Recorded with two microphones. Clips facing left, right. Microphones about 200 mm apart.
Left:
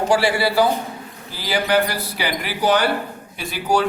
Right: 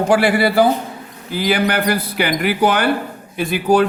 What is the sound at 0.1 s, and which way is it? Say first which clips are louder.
Speech: right 4 dB; 55° right (ahead or behind).